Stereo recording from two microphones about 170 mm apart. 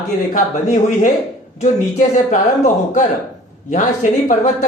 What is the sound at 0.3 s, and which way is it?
A man's voice, 45° left (ahead or behind).